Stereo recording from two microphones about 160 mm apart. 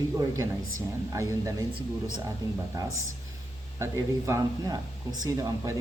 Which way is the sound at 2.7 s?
20° right (ahead or behind).